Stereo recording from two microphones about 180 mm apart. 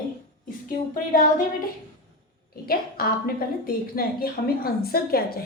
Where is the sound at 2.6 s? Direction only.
55° left (ahead or behind).